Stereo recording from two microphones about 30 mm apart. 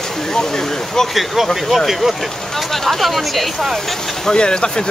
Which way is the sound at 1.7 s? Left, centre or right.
Centre.